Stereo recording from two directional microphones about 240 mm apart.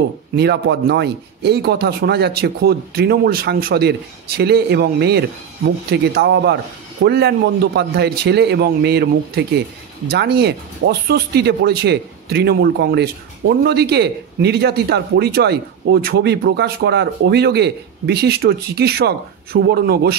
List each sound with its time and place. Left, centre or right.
0.4 s a man's voice: right